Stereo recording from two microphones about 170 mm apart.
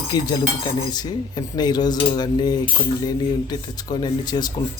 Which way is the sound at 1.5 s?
25° left (ahead or behind).